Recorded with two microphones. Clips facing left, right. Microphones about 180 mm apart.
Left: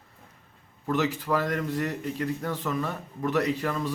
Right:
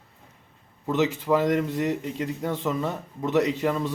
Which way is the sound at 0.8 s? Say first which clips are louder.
Right 3 dB; 20° right (ahead or behind).